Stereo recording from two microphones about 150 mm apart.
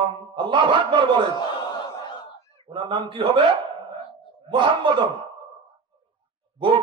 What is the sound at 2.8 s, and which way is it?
Speech, 35° right (ahead or behind).